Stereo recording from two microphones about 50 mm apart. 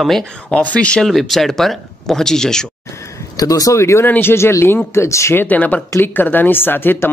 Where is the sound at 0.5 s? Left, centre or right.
Left.